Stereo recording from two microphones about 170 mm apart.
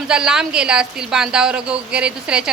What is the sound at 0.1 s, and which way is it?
A woman's voice, 5° right (ahead or behind).